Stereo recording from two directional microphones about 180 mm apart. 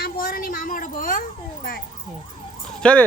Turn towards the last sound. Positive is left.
turn(degrees=5)  # may be behind; listen again after turning